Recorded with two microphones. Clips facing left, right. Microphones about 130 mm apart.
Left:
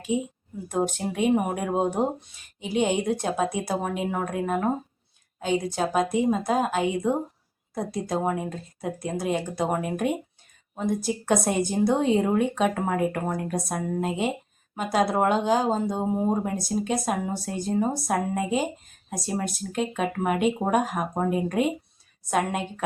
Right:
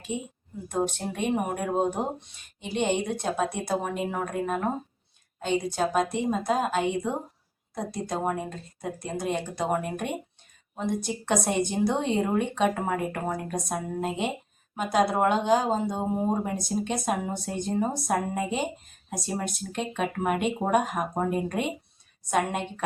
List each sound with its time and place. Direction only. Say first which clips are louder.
0.1 s a woman's voice: left 6 dB; 5° left (ahead or behind)